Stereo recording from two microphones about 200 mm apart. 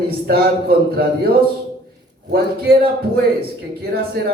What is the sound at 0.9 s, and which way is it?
Speech, 50° right (ahead or behind).